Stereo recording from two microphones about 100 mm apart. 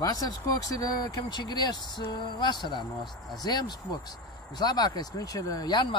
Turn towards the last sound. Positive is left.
turn(degrees=45)  # may be behind; listen again after turning